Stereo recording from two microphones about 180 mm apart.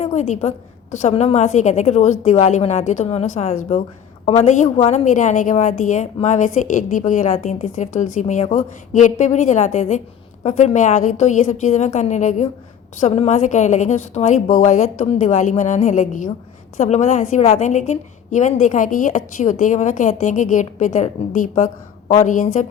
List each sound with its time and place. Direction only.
0.0 s a woman's voice: 40° left (ahead or behind)